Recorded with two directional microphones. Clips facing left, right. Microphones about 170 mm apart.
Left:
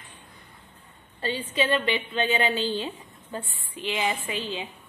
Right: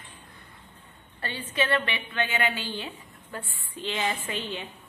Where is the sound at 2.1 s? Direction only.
30° left (ahead or behind).